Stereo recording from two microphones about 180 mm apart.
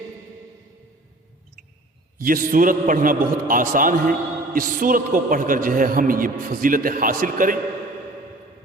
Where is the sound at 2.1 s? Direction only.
50° right (ahead or behind).